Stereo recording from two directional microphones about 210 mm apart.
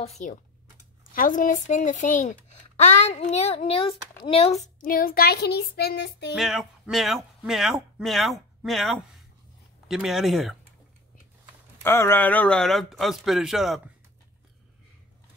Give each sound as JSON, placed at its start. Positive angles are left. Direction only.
{"t": 1.1, "sound": "a child's voice", "side_deg": 40}
{"t": 6.3, "sound": "a man's voice", "side_deg": 0}
{"t": 11.8, "sound": "a man's voice", "side_deg": 10}